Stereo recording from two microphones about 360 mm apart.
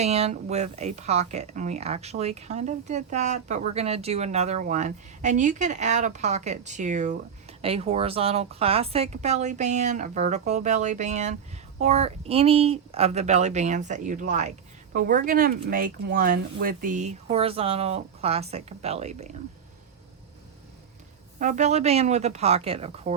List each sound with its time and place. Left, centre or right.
0.0 s speech: centre
21.3 s speech: right